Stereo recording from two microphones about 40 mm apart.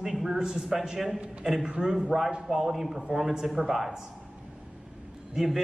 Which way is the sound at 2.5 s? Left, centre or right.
Centre.